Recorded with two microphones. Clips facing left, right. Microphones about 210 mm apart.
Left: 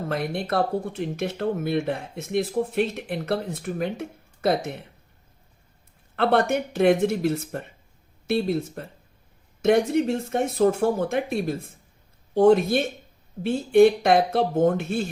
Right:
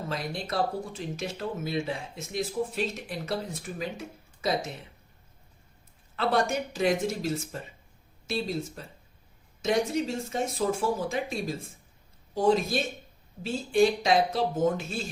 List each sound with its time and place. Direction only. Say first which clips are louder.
0.0 s speech: left 6 dB; 60° left (ahead or behind)
6.1 s speech: left 5 dB; 60° left (ahead or behind)